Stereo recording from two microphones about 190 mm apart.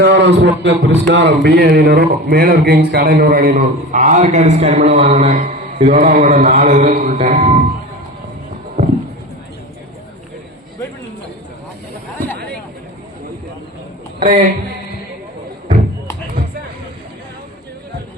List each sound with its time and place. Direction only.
0.0 s a man's voice: 65° right (ahead or behind); by 7.6 s 40° right (ahead or behind)
14.2 s a woman's voice: 50° right (ahead or behind)